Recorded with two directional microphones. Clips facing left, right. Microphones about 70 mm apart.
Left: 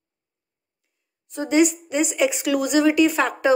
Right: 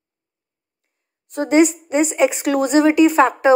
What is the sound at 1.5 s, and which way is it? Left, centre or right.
A woman's voice, right.